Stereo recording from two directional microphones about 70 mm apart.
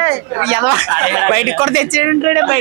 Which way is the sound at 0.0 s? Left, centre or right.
Right.